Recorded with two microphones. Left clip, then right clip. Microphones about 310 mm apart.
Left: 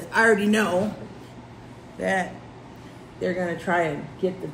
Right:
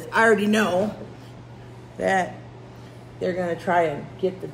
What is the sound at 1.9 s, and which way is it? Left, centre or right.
A man's voice, right.